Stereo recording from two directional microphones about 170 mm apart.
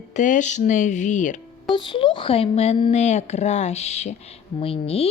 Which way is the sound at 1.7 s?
30° left (ahead or behind).